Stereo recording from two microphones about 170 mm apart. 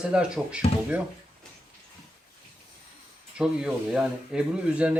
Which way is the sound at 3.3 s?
5° right (ahead or behind).